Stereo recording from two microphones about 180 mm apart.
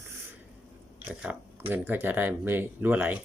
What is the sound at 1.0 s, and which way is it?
Speech, 10° right (ahead or behind).